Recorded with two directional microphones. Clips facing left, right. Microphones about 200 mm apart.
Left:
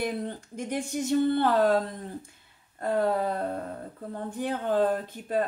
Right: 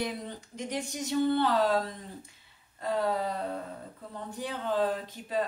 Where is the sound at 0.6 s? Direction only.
50° left (ahead or behind).